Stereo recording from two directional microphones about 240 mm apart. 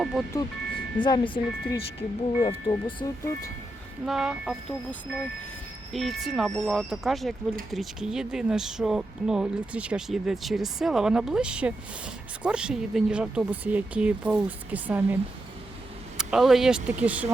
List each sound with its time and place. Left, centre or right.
0.0 s speech: centre
1.0 s speech: centre
4.0 s speech: centre
16.1 s speech: centre